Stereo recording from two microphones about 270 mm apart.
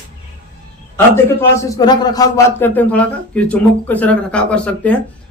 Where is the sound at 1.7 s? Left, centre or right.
Centre.